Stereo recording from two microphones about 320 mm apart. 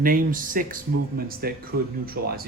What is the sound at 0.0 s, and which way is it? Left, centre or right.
Speech, right.